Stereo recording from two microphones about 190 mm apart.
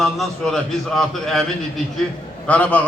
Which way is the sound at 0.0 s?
Centre (ahead or behind).